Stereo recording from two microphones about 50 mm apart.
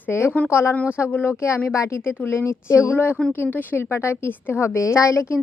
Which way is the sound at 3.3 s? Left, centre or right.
Left.